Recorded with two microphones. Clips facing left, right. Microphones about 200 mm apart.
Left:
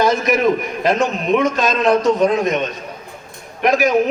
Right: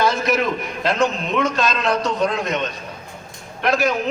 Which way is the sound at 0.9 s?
15° left (ahead or behind).